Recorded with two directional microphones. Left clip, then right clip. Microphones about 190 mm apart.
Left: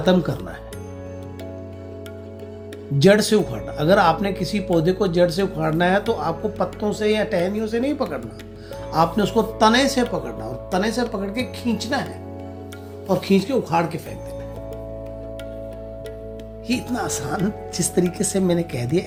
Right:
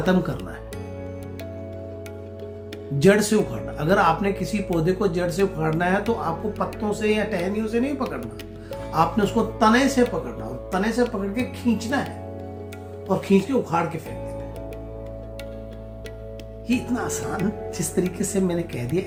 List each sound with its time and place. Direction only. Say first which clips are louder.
0.0 s speech: left 4 dB; 45° left (ahead or behind)
3.0 s speech: left 3 dB; 40° left (ahead or behind)
13.1 s speech: left 1 dB; 45° left (ahead or behind)
16.6 s speech: left 1 dB; 45° left (ahead or behind)